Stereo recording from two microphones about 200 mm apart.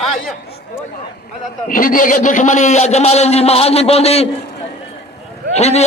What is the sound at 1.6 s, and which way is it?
A man's voice, 40° left (ahead or behind).